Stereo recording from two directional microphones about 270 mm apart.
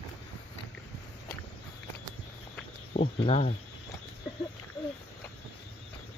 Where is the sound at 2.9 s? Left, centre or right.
Left.